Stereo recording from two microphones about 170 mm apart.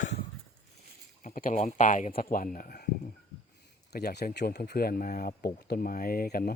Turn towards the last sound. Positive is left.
turn(degrees=60)  # may be behind; listen again after turning